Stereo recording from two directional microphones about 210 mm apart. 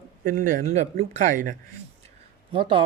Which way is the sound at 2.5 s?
25° right (ahead or behind).